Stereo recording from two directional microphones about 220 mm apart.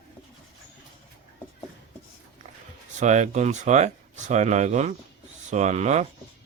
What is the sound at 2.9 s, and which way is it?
Speech, 30° right (ahead or behind).